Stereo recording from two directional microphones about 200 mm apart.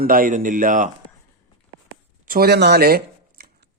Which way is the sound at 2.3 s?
50° right (ahead or behind).